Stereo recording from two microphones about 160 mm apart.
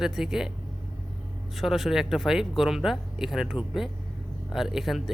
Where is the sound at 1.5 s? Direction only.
Centre (ahead or behind).